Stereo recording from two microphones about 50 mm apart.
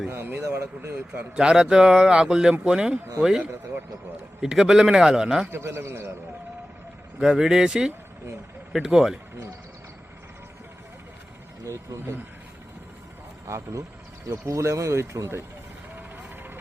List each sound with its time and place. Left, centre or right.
0.1 s speech: right
0.9 s speech: right
1.4 s speech: centre
4.6 s speech: centre
5.5 s a man's voice: right
7.2 s speech: centre
11.6 s speech: right
14.3 s speech: right
16.0 s vehicle: right